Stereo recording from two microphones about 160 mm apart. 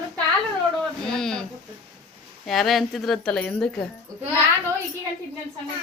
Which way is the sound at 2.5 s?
Centre (ahead or behind).